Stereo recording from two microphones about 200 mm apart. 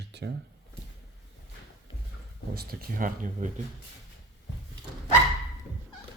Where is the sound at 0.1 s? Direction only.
60° right (ahead or behind).